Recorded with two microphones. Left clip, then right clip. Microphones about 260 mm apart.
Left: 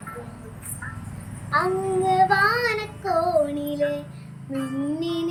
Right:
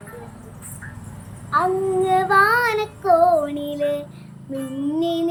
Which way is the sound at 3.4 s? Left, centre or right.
Centre.